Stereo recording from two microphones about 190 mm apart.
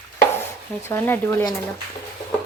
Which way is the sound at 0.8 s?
10° left (ahead or behind).